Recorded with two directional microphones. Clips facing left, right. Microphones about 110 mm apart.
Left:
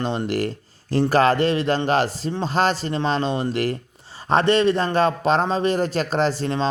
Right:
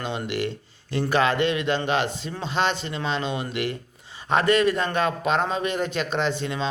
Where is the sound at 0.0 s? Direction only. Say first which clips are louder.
Left 4 dB; 35° left (ahead or behind).